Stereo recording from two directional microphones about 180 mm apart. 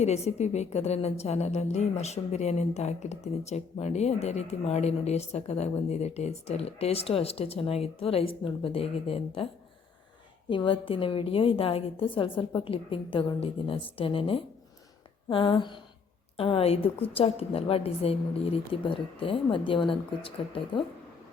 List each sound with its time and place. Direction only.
0.0 s speech: 35° left (ahead or behind)
10.5 s a woman's voice: 30° left (ahead or behind)